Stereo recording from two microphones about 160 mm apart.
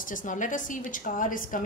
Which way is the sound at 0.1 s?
55° left (ahead or behind).